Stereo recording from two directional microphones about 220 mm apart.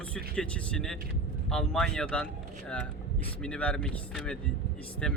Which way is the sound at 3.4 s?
5° left (ahead or behind).